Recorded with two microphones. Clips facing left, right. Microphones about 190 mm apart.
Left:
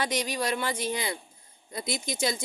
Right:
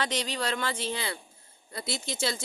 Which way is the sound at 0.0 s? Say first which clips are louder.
Left 2 dB; 10° left (ahead or behind).